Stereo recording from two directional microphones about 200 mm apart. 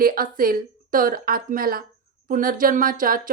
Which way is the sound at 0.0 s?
45° right (ahead or behind).